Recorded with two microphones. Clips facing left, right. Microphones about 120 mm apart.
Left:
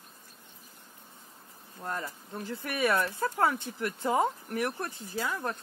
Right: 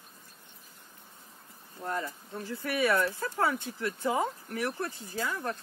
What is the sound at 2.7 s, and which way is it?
Speech, 20° left (ahead or behind).